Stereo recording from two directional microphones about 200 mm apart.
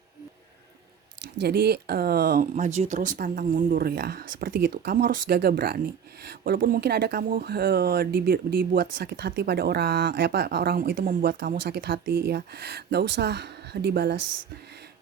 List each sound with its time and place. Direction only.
1.4 s speech: 55° right (ahead or behind)